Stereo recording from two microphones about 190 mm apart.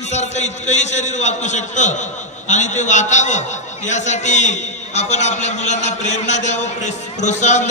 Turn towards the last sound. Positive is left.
turn(degrees=35)  # may be behind; listen again after turning